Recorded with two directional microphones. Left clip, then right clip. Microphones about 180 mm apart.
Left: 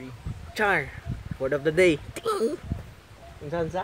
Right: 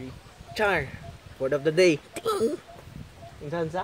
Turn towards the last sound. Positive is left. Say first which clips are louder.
# left 1 dB
turn(degrees=-10)  # may be behind; listen again after turning